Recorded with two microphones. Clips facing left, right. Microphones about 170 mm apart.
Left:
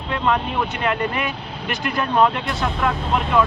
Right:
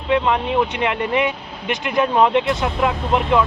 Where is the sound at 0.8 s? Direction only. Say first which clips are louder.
Right 3 dB; 20° right (ahead or behind).